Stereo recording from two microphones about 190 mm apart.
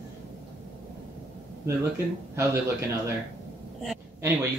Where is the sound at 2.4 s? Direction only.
15° right (ahead or behind).